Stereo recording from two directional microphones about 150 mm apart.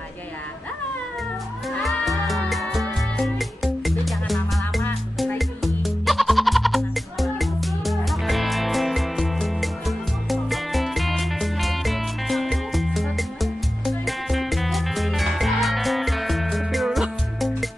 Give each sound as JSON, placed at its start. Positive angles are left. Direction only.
{"t": 1.7, "sound": "music", "side_deg": 0}